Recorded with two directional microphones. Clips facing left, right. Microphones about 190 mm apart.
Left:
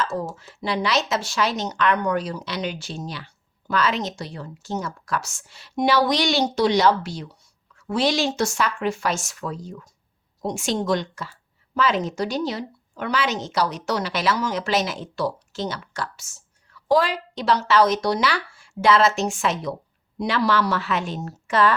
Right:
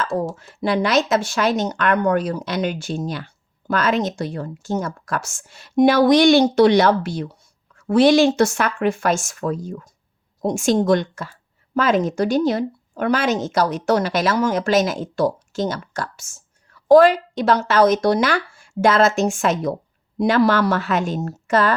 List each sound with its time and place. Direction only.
0.3 s speech: 50° right (ahead or behind)